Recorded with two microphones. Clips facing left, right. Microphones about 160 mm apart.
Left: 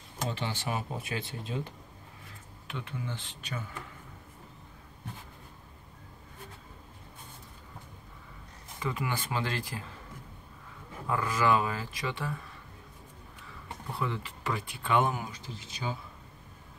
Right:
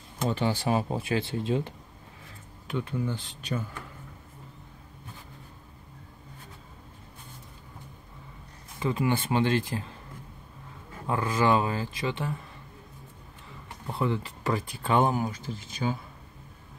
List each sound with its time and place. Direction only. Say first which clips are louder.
0.3 s speech: right 9 dB; 40° right (ahead or behind)
2.7 s speech: right 8 dB; 40° right (ahead or behind)
8.7 s speech: right 7 dB; 30° right (ahead or behind)
11.1 s speech: right 3 dB; 25° right (ahead or behind)
13.9 s speech: right 6 dB; 35° right (ahead or behind)
15.3 s speech: right 6 dB; 50° right (ahead or behind)